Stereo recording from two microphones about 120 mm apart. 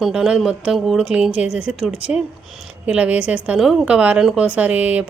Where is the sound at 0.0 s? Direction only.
5° right (ahead or behind).